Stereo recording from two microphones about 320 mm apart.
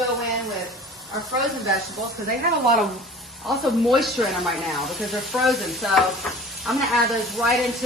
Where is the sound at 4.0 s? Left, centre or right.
Centre.